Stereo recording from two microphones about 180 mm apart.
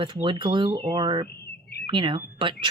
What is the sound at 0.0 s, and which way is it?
Speech, 30° right (ahead or behind).